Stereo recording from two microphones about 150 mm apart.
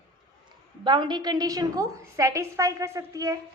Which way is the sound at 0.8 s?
30° right (ahead or behind).